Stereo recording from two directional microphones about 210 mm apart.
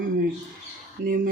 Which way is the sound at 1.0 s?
40° right (ahead or behind).